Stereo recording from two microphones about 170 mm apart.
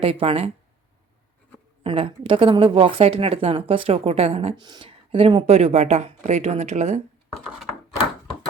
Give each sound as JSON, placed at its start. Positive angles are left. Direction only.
{"t": 0.0, "sound": "a woman's voice", "side_deg": -35}
{"t": 1.8, "sound": "a woman's voice", "side_deg": -35}